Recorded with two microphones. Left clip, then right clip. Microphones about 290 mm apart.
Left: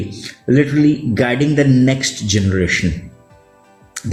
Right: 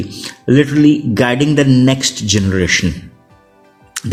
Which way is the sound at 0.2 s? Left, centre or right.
Right.